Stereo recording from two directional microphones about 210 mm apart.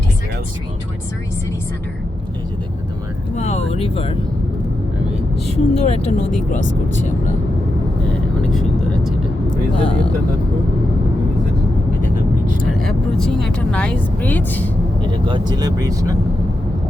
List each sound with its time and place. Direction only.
3.3 s vehicle: 30° left (ahead or behind)
5.5 s speech: 30° left (ahead or behind)
9.8 s speech: 25° left (ahead or behind)
12.7 s speech: centre (ahead or behind)
15.3 s speech: 20° right (ahead or behind)